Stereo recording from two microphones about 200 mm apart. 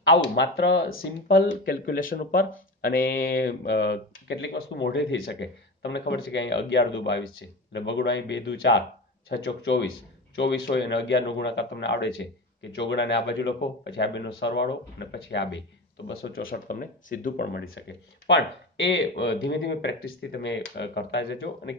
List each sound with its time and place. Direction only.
0.4 s speech: 60° left (ahead or behind)
16.3 s speech: 45° left (ahead or behind)
17.6 s speech: 60° left (ahead or behind)